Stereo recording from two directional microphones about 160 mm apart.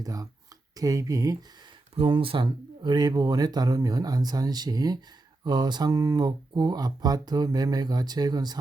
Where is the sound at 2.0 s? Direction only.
35° right (ahead or behind).